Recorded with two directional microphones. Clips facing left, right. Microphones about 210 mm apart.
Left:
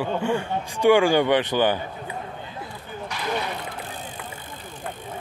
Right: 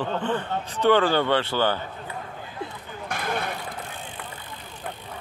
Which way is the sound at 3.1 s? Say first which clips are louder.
Right 4 dB; 50° right (ahead or behind).